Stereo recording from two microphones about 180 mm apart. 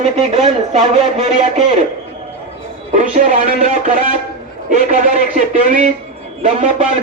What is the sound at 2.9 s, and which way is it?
Speech, 45° right (ahead or behind).